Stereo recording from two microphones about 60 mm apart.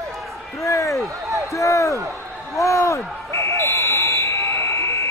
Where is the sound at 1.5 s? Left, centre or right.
Left.